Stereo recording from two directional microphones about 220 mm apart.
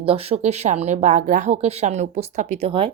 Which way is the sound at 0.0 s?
25° right (ahead or behind).